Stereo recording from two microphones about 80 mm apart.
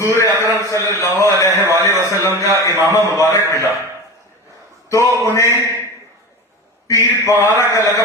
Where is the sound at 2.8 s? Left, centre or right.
Left.